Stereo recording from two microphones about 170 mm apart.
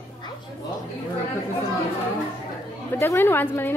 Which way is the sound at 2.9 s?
15° left (ahead or behind).